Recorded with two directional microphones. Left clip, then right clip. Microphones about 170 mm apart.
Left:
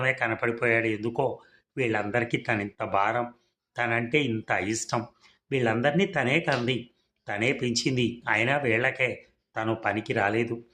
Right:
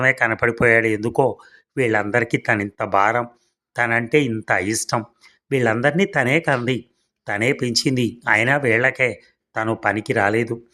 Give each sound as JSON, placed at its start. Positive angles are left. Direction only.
{"t": 0.0, "sound": "speech", "side_deg": -35}